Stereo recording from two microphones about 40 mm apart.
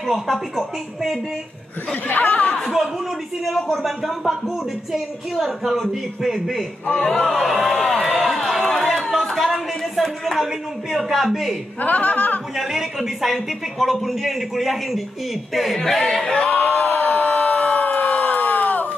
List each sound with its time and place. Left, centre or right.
0.0 s a man's voice: centre
2.0 s speech: left
3.4 s a man's voice: centre
11.8 s speech: left
12.5 s a man's voice: centre
16.5 s crowd: left